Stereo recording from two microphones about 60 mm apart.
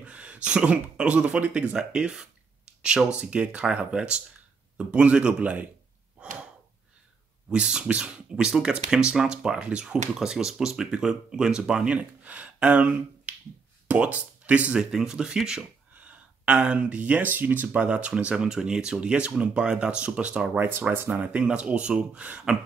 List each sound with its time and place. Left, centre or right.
0.0 s speech: right
7.4 s speech: centre
14.8 s speech: centre
16.0 s speech: right
17.7 s speech: centre
20.5 s speech: right
21.1 s speech: right